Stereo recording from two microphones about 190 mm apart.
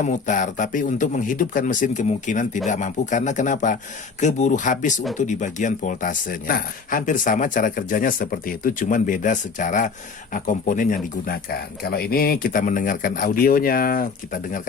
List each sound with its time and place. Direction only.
0.0 s a man's voice: 40° left (ahead or behind)